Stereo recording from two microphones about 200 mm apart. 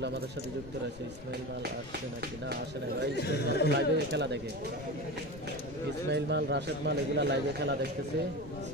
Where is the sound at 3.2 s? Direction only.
55° left (ahead or behind).